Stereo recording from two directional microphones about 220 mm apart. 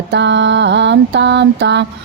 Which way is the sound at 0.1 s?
55° right (ahead or behind).